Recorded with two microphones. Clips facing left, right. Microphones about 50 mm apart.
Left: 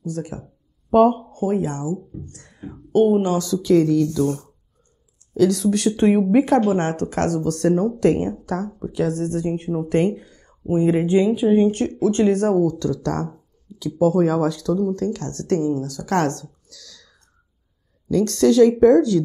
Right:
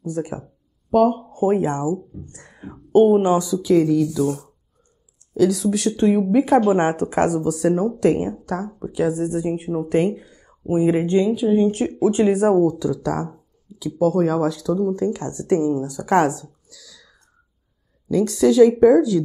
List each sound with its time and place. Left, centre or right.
0.0 s speech: right
0.8 s speech: left
1.4 s speech: right; by 5.9 s centre
5.9 s speech: left
6.6 s speech: centre
11.1 s speech: centre
11.3 s speech: left
11.7 s speech: centre
14.9 s speech: centre
18.1 s speech: centre